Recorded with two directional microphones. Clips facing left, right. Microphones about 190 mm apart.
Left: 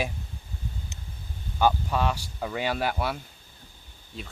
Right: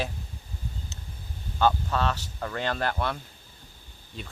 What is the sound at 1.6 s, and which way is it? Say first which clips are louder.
Speech: left 1 dB; 10° left (ahead or behind).